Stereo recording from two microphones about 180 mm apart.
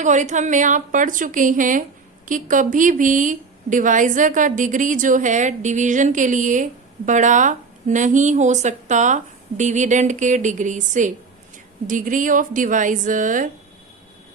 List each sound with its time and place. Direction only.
0.0 s a woman's voice: 45° right (ahead or behind)